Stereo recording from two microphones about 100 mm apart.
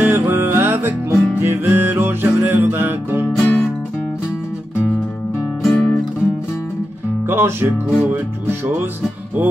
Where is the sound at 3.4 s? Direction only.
10° left (ahead or behind).